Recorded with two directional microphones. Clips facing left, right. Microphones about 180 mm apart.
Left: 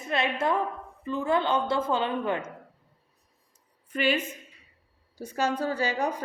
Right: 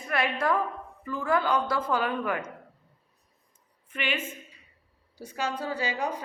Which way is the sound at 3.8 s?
40° left (ahead or behind).